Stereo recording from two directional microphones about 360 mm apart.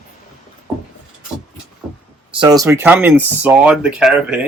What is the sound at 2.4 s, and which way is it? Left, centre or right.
Speech, centre.